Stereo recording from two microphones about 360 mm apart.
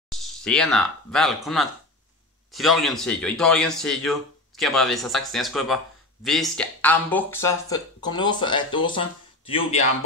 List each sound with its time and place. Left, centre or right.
0.1 s a man's voice: centre